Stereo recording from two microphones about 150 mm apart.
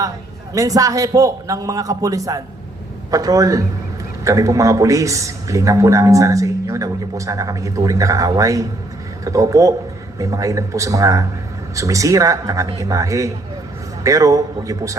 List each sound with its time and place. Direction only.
0.5 s a man's voice: 25° right (ahead or behind)